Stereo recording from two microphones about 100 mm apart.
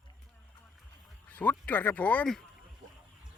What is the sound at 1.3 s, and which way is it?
Speech, 15° left (ahead or behind).